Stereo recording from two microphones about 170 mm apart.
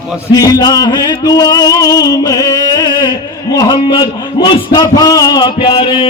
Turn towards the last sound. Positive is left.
turn(degrees=30)  # may be behind; listen again after turning